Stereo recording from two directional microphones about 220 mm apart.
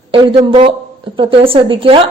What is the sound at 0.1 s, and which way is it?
Speech, 25° right (ahead or behind).